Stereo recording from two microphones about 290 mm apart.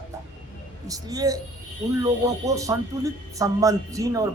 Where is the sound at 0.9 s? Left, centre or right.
Centre.